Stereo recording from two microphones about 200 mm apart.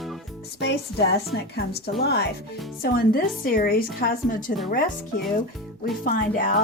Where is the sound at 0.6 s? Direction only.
55° left (ahead or behind).